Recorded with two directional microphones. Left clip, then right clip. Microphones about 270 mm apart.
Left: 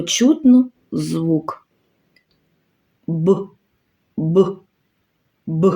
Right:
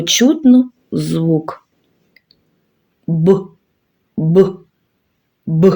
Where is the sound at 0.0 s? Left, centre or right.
Centre.